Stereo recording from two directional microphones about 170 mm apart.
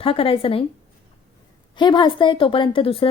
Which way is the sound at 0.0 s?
35° left (ahead or behind).